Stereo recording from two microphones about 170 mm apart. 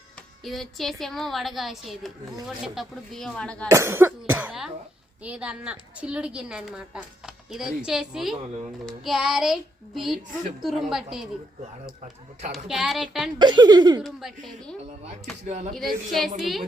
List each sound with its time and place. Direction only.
0.4 s a woman's voice: centre (ahead or behind)
3.7 s a woman's voice: 15° right (ahead or behind)
12.5 s a woman's voice: centre (ahead or behind)
13.4 s speech: 25° right (ahead or behind)
14.0 s a woman's voice: centre (ahead or behind)